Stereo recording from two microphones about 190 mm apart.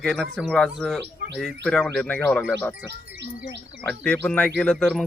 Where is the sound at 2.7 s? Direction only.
70° right (ahead or behind).